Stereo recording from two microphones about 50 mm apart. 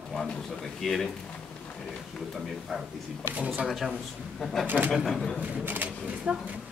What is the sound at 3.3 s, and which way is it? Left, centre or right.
Speech, right.